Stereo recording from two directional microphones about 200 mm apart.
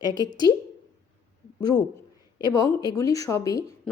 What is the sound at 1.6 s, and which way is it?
Speech, 20° left (ahead or behind).